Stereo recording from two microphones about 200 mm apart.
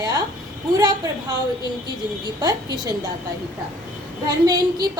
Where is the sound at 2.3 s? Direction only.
20° right (ahead or behind).